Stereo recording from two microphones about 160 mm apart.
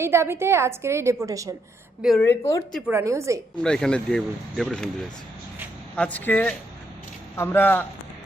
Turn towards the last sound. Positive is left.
turn(degrees=10)  # may be behind; listen again after turning